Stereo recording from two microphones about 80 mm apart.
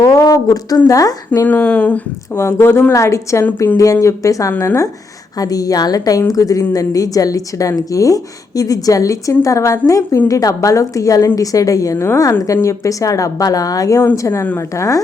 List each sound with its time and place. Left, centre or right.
0.0 s a sound: left
0.9 s a woman's voice: left
1.5 s speech: centre
2.3 s a woman's voice: left